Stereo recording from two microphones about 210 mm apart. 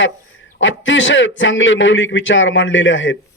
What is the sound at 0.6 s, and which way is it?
A man's voice, 60° left (ahead or behind).